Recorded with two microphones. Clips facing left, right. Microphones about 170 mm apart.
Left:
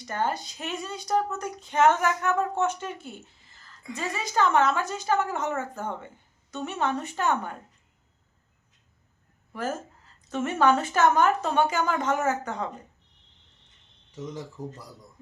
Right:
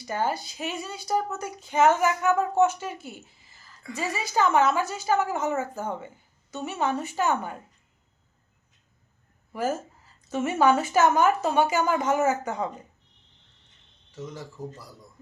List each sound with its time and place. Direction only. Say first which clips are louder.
0.0 s a woman's voice: right 1 dB; 5° right (ahead or behind)
9.5 s a woman's voice: right 3 dB; 5° right (ahead or behind)
14.1 s speech: left 2 dB; 15° left (ahead or behind)